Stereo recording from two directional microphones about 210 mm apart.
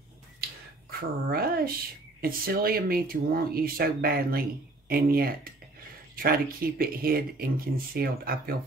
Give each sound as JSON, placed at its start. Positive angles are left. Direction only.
{"t": 1.3, "sound": "speech", "side_deg": -45}